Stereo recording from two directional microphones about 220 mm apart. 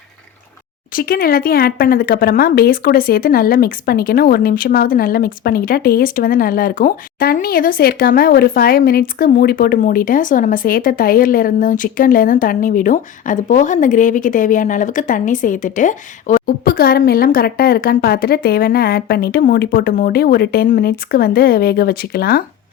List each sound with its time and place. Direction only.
0.9 s a woman's voice: 40° left (ahead or behind)